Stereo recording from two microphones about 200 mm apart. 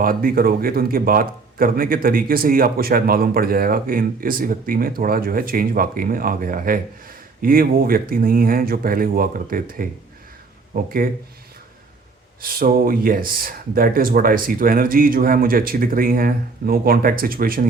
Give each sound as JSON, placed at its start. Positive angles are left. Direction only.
{"t": 0.0, "sound": "speech", "side_deg": -45}
{"t": 12.4, "sound": "speech", "side_deg": -45}